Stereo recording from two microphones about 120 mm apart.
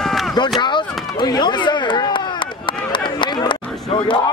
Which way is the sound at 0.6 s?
40° left (ahead or behind).